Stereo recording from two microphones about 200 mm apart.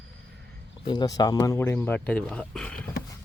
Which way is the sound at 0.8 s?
20° left (ahead or behind).